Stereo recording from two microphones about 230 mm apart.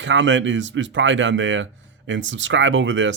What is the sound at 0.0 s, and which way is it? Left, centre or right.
Speech, right.